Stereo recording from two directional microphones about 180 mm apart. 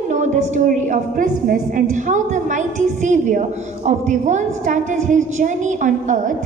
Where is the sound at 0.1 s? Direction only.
40° right (ahead or behind).